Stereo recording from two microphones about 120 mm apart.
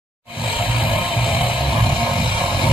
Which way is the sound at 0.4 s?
45° left (ahead or behind).